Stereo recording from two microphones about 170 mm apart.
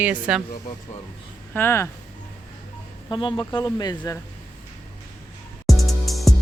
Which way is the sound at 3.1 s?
30° left (ahead or behind).